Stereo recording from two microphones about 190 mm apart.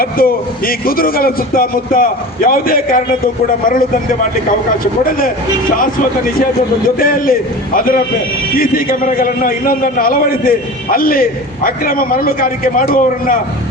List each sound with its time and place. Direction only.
0.0 s a man's voice: 50° left (ahead or behind)
5.0 s a man's voice: 50° left (ahead or behind)